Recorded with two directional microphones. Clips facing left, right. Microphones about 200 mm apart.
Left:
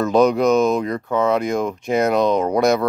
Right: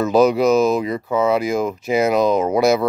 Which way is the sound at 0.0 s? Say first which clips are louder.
Right 1 dB; 5° right (ahead or behind).